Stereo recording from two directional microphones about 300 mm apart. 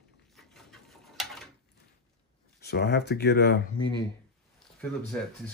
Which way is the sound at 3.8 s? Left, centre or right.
Centre.